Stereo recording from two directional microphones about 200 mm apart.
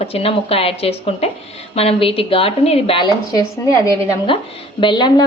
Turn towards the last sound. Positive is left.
turn(degrees=20)  # may be behind; listen again after turning